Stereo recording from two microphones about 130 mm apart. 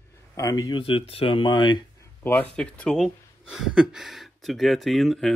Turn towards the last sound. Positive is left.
turn(degrees=0)  # may be behind; listen again after turning